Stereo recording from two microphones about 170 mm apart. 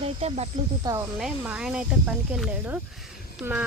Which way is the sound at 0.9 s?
20° right (ahead or behind).